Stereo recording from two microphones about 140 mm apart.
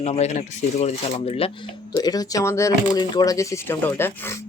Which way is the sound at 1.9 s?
30° left (ahead or behind).